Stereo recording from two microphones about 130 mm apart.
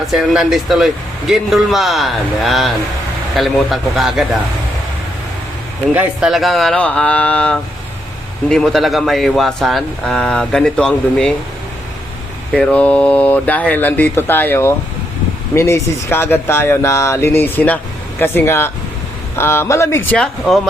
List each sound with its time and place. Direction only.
0.1 s speech: 5° right (ahead or behind)
5.9 s speech: 10° right (ahead or behind)
12.5 s speech: 10° left (ahead or behind)
20.1 s speech: 5° left (ahead or behind)